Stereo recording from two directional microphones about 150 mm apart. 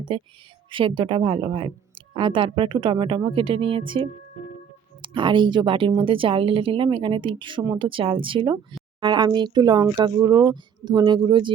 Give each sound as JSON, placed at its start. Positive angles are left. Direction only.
{"t": 0.1, "sound": "speech", "side_deg": -35}